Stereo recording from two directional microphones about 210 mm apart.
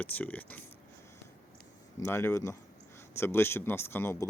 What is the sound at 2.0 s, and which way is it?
Speech, 10° left (ahead or behind).